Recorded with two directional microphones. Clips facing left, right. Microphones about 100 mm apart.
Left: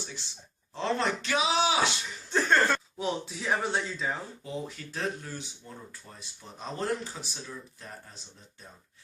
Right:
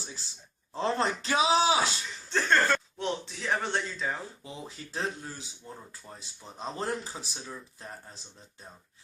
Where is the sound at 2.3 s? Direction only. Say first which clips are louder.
Left 1 dB; 5° left (ahead or behind).